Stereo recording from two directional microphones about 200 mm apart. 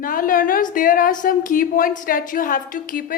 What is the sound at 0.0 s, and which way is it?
A woman's voice, 45° left (ahead or behind).